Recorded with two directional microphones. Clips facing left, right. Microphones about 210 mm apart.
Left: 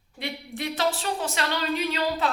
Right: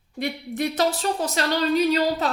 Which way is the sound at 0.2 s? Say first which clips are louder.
Right 7 dB; 45° right (ahead or behind).